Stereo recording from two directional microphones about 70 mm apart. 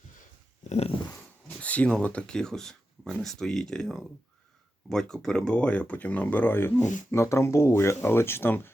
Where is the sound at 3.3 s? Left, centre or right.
Centre; by 8.7 s left.